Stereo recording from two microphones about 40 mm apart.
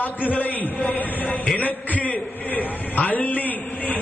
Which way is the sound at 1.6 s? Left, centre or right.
Left.